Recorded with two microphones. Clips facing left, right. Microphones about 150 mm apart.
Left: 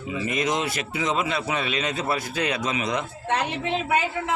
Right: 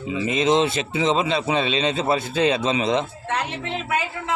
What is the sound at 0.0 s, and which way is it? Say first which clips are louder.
A man's voice: right 4 dB; 25° right (ahead or behind).